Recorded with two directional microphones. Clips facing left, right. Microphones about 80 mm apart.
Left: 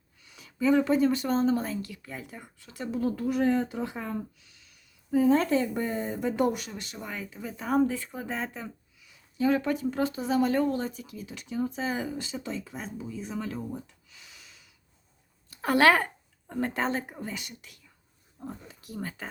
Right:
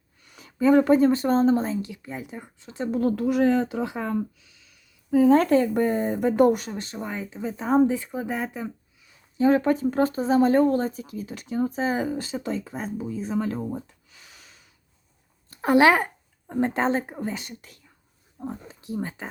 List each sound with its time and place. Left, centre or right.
0.3 s speech: right
2.9 s speech: right
5.1 s speech: right; by 8.7 s centre
9.4 s speech: right
15.6 s speech: centre